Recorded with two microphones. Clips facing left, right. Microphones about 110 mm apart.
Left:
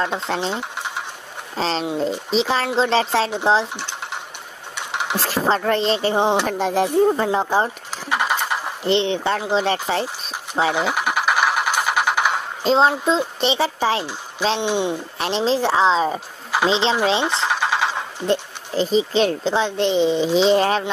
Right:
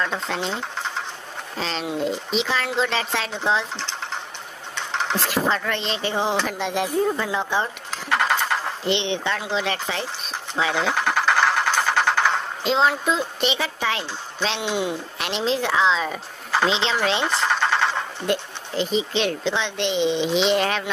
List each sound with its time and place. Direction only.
0.0 s speech: 30° left (ahead or behind)
1.6 s speech: 35° left (ahead or behind)
3.7 s sewing machine: 15° left (ahead or behind)
4.7 s a sound: 15° left (ahead or behind)
5.2 s speech: 35° left (ahead or behind)
7.9 s a sound: 15° left (ahead or behind)
8.8 s speech: 40° left (ahead or behind)
10.7 s music: 15° left (ahead or behind)
12.6 s speech: 35° left (ahead or behind)
17.5 s a sound: 15° left (ahead or behind)
18.2 s speech: 30° left (ahead or behind)